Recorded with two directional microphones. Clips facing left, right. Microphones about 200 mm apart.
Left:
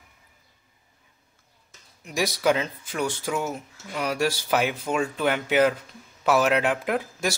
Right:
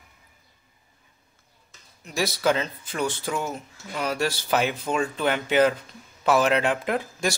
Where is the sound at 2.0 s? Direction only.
15° left (ahead or behind).